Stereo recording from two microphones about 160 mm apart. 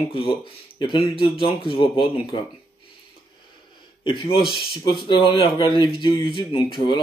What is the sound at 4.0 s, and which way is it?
A man's voice, 30° left (ahead or behind).